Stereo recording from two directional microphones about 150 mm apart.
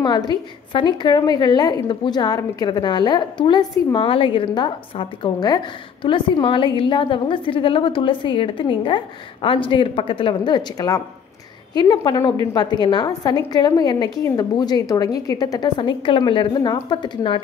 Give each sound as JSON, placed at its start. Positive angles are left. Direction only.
{"t": 0.0, "sound": "a woman's voice", "side_deg": 30}